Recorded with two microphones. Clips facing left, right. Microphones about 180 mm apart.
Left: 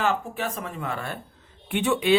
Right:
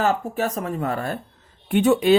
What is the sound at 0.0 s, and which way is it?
Speech, 40° right (ahead or behind).